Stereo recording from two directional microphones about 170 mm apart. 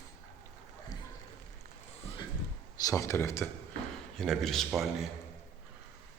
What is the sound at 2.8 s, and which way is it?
Speech, 15° left (ahead or behind).